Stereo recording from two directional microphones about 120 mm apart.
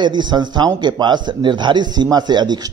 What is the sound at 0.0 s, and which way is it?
A man's voice, 40° right (ahead or behind).